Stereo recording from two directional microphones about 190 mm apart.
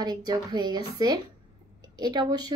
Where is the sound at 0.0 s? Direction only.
20° right (ahead or behind).